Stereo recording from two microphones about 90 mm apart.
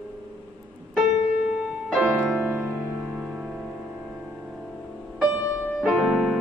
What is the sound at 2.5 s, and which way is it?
Music, 20° right (ahead or behind).